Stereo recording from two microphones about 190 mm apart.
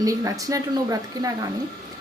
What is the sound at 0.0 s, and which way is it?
A woman's voice, 20° right (ahead or behind).